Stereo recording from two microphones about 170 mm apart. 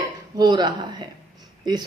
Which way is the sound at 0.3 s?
25° right (ahead or behind).